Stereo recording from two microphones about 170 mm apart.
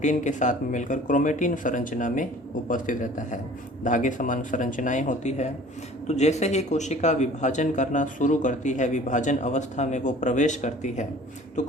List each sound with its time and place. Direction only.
0.0 s speech: 45° left (ahead or behind)